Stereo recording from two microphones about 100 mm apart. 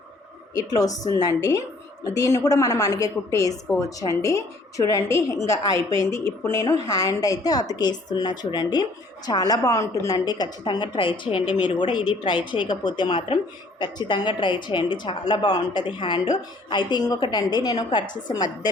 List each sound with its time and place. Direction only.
0.5 s a woman's voice: 35° left (ahead or behind)